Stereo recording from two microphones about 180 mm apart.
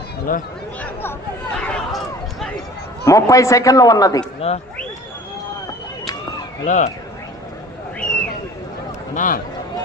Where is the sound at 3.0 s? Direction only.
15° left (ahead or behind).